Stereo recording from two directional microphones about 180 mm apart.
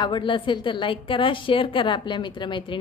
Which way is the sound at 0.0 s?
25° left (ahead or behind).